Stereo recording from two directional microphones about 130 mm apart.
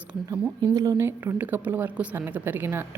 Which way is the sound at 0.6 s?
30° right (ahead or behind).